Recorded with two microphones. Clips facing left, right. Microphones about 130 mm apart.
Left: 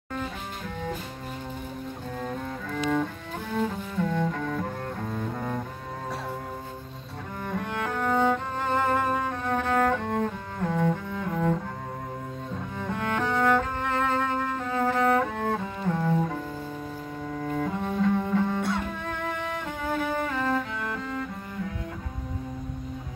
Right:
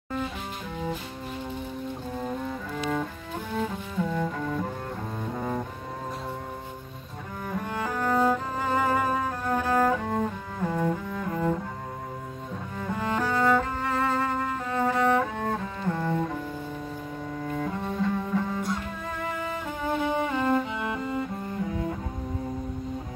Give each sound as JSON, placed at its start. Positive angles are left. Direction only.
{"t": 2.1, "sound": "cello", "side_deg": -5}
{"t": 7.4, "sound": "cello", "side_deg": -5}
{"t": 12.7, "sound": "music", "side_deg": 0}
{"t": 17.3, "sound": "cello", "side_deg": 0}
{"t": 19.0, "sound": "music", "side_deg": -5}